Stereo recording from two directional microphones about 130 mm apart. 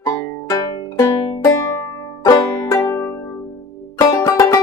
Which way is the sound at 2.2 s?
30° left (ahead or behind).